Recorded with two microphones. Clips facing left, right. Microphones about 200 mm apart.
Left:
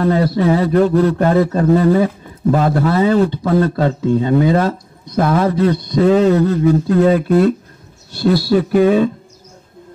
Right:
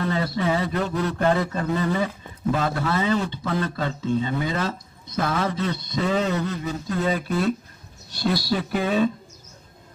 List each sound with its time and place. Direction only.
0.0 s a man's voice: 50° left (ahead or behind)